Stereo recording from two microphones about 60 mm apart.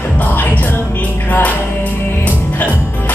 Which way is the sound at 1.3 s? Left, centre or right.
Left.